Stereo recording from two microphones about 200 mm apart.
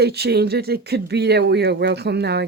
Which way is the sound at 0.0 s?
55° right (ahead or behind).